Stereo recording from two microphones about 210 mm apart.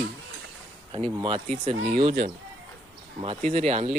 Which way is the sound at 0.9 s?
25° right (ahead or behind).